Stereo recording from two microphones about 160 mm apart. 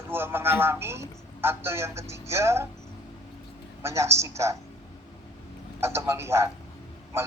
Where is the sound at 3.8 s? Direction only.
20° right (ahead or behind).